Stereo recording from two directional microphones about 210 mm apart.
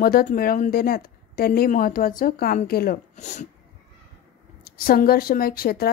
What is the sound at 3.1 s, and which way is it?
Speech, 35° left (ahead or behind).